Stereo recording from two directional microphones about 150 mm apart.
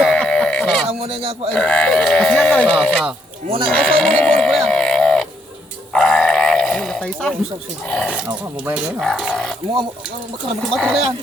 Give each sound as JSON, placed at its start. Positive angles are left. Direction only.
{"t": 0.0, "sound": "chicken", "side_deg": 5}
{"t": 0.9, "sound": "speech", "side_deg": -40}
{"t": 1.5, "sound": "speech", "side_deg": 5}
{"t": 3.7, "sound": "livestock", "side_deg": 5}
{"t": 5.9, "sound": "dog", "side_deg": 5}
{"t": 7.9, "sound": "speech", "side_deg": 5}
{"t": 10.6, "sound": "speech", "side_deg": 5}